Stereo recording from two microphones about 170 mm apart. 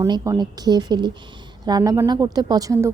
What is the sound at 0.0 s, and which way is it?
A woman's voice, 20° right (ahead or behind).